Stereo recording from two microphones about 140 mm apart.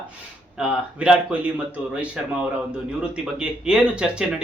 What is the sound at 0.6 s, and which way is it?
Speech, 5° right (ahead or behind).